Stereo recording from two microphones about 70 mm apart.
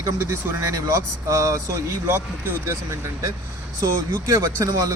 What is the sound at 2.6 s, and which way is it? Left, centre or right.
Speech, right.